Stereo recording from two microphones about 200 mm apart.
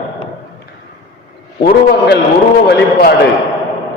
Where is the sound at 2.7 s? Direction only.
50° left (ahead or behind).